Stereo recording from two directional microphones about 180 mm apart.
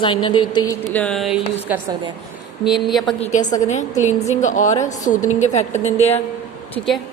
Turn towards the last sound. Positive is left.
turn(degrees=0)  # may be behind; listen again after turning